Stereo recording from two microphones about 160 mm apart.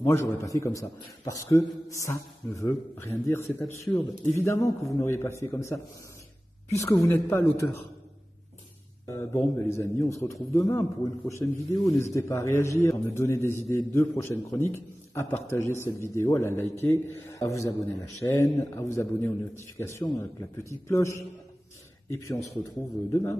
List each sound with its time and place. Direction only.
0.0 s a man's voice: 15° left (ahead or behind)
9.0 s a man's voice: 15° left (ahead or behind)